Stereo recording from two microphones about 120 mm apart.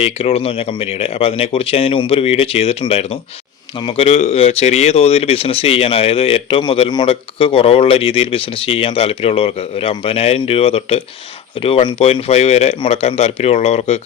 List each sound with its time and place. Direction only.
0.0 s speech: 55° left (ahead or behind)
3.8 s speech: 40° left (ahead or behind)
4.0 s speech: 70° left (ahead or behind)